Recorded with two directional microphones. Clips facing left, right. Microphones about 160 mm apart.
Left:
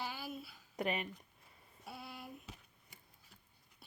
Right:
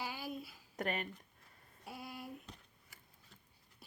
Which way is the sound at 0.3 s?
Centre (ahead or behind).